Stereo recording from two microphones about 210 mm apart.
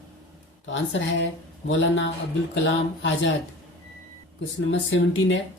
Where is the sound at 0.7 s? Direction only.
60° left (ahead or behind).